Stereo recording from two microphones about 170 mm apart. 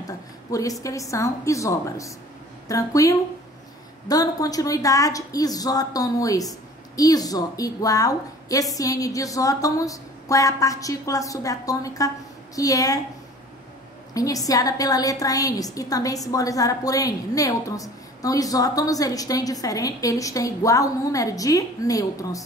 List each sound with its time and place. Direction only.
0.0 s a sound: 20° left (ahead or behind)
0.8 s a woman's voice: 20° left (ahead or behind)
14.1 s a woman's voice: 20° left (ahead or behind)